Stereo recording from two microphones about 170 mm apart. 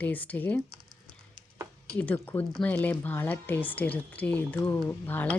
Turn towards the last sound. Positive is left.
turn(degrees=10)  # may be behind; listen again after turning